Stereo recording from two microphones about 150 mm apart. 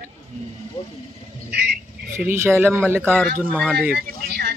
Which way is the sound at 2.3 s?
15° right (ahead or behind).